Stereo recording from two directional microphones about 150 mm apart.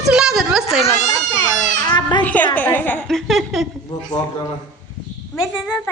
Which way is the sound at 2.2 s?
10° left (ahead or behind).